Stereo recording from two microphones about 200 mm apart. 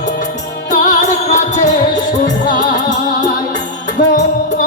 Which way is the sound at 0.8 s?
40° left (ahead or behind).